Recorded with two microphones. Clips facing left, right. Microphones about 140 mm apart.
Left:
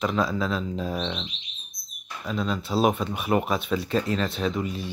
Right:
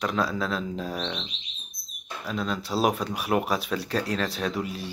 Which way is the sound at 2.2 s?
Centre (ahead or behind).